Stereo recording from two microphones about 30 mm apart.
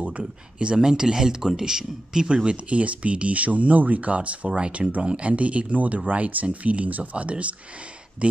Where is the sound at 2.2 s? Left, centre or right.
Right.